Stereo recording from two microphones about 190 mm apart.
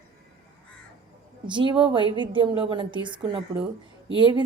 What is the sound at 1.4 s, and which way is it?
A woman's voice, 25° right (ahead or behind).